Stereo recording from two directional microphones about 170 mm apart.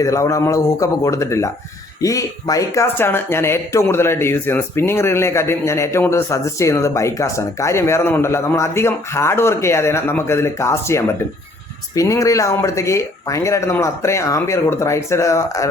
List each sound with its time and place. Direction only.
0.0 s speech: 20° left (ahead or behind)